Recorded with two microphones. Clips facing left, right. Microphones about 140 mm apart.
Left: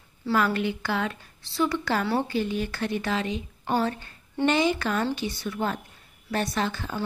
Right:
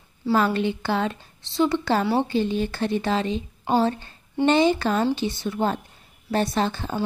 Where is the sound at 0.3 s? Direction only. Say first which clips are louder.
Right 3 dB; 30° right (ahead or behind).